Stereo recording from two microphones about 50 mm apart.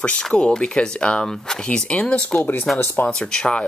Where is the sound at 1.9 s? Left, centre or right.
Left.